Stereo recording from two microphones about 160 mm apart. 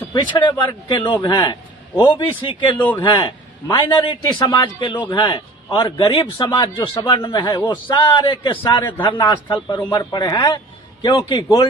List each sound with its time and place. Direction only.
0.1 s a man's voice: 30° left (ahead or behind)
9.3 s a man's voice: 30° left (ahead or behind)